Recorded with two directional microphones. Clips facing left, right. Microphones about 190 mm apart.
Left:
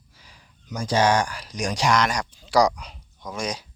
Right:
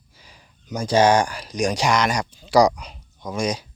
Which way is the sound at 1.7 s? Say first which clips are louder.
Left 2 dB; 5° right (ahead or behind).